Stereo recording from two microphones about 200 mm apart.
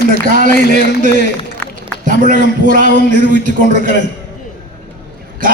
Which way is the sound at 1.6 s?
10° left (ahead or behind).